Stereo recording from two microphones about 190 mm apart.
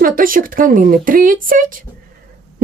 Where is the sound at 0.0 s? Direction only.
45° right (ahead or behind).